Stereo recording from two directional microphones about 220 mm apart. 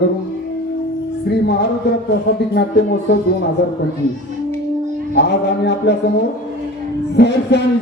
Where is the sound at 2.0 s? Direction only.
50° left (ahead or behind).